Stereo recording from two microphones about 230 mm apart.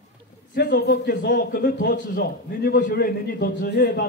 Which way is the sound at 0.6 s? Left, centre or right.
Left.